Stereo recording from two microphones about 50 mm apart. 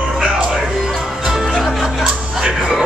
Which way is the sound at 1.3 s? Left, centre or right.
Centre.